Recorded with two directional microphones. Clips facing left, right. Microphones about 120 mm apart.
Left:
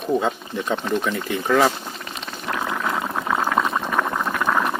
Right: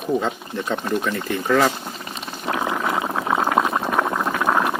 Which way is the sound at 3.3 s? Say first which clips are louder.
Right 2 dB; 15° right (ahead or behind).